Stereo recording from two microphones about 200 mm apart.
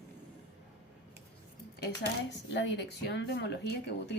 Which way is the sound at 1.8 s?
60° left (ahead or behind).